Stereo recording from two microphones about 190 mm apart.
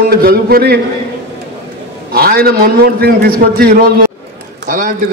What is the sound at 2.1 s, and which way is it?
A man's voice, 55° right (ahead or behind).